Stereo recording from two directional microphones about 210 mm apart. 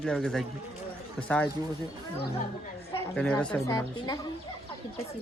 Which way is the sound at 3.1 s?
5° left (ahead or behind).